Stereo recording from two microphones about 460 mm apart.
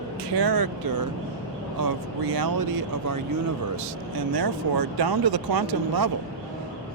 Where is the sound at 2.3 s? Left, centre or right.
Right.